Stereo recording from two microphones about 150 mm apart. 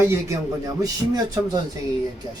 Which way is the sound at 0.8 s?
25° right (ahead or behind).